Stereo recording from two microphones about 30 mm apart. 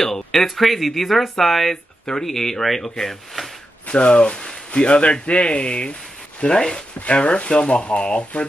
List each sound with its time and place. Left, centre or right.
0.0 s speech: centre
3.9 s a man's voice: left
7.4 s speech: left
7.8 s a man's voice: left